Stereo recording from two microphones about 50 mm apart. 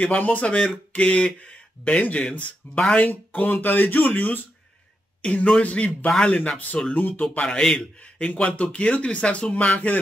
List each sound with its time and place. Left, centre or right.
0.2 s speech: left
3.3 s speech: left
5.2 s speech: left
6.8 s speech: left
7.4 s a man's voice: centre
8.0 s speech: left